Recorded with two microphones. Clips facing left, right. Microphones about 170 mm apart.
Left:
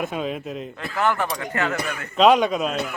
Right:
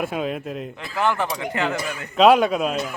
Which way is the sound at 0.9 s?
15° right (ahead or behind).